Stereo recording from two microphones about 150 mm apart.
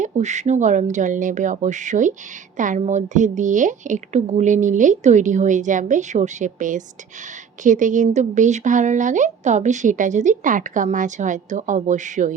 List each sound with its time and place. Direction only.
0.0 s a woman's voice: 50° right (ahead or behind)